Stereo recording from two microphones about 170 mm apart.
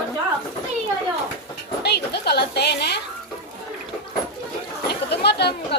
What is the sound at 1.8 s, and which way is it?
A woman's voice, 75° left (ahead or behind).